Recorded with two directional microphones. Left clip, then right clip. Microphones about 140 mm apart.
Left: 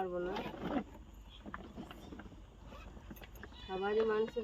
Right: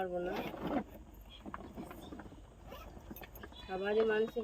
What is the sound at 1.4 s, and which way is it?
Vehicle, 25° right (ahead or behind).